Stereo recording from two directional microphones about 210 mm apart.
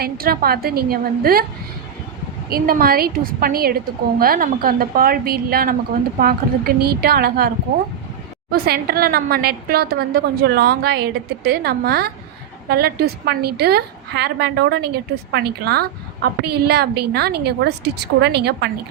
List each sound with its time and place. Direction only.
0.0 s a woman's voice: 45° right (ahead or behind)
2.5 s a woman's voice: 45° right (ahead or behind)